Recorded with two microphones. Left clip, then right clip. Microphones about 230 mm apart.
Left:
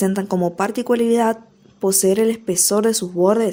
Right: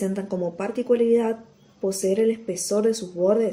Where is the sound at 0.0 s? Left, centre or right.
Left.